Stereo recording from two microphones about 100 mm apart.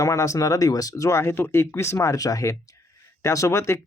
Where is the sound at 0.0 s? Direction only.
30° left (ahead or behind).